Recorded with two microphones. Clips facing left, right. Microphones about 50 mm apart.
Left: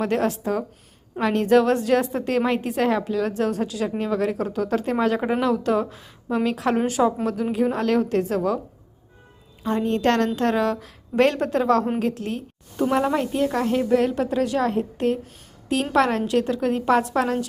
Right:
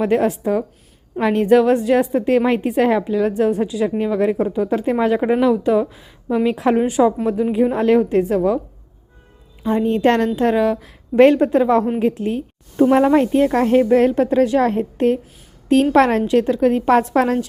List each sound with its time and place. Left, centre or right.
0.0 s a woman's voice: centre
7.5 s a woman's voice: centre
9.6 s a woman's voice: centre; by 17.4 s right